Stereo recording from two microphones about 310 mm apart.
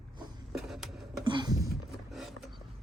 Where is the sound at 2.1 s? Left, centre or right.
Centre.